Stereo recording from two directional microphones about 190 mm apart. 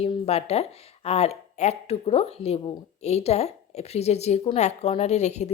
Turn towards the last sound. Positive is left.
turn(degrees=35)  # may be behind; listen again after turning